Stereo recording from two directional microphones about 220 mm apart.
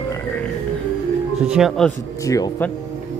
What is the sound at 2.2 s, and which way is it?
Speech, 15° left (ahead or behind).